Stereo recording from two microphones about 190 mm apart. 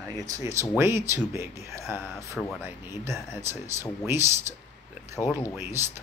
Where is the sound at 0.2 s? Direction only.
15° right (ahead or behind).